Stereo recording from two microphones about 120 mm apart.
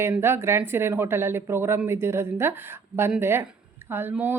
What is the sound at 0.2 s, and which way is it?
Speech, 20° right (ahead or behind).